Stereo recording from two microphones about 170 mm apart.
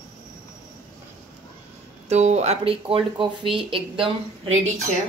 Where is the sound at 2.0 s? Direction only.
40° right (ahead or behind).